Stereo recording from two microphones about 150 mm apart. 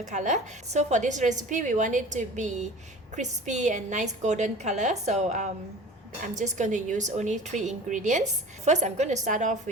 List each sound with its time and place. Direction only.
0.0 s a woman's voice: 55° right (ahead or behind)